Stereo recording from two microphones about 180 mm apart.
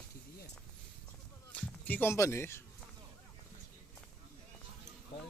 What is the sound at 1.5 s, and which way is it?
Speech, 10° left (ahead or behind).